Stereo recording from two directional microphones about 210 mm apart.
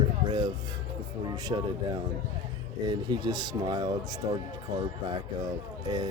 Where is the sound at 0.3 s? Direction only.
20° right (ahead or behind).